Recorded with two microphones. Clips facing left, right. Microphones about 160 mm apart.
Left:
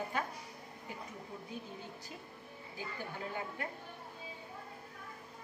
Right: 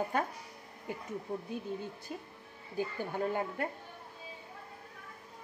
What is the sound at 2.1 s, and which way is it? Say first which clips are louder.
A woman's voice: right 5 dB; 55° right (ahead or behind).